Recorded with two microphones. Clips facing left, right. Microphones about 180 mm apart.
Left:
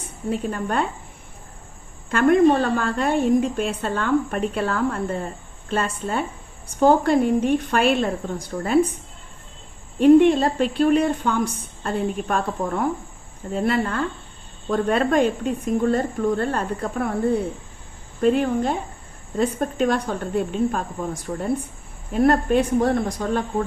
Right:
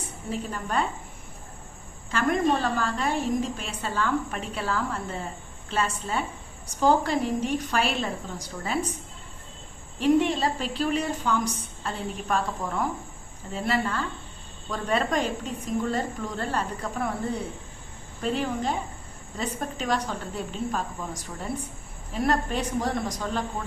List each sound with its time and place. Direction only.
0.3 s a woman's voice: 55° left (ahead or behind)
2.0 s a woman's voice: 60° left (ahead or behind)
10.0 s a woman's voice: 55° left (ahead or behind)